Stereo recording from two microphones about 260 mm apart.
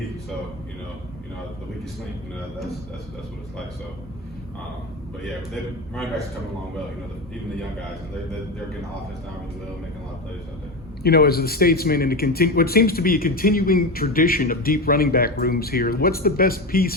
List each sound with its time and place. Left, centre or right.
11.0 s a man's voice: left